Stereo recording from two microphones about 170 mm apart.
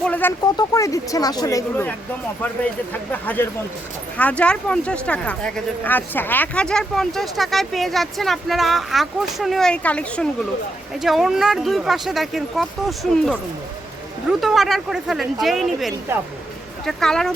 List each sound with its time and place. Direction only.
0.0 s speech: 10° left (ahead or behind)
0.5 s speech: 20° left (ahead or behind); by 15.9 s centre (ahead or behind)
16.1 s speech: 15° right (ahead or behind)
16.8 s speech: centre (ahead or behind)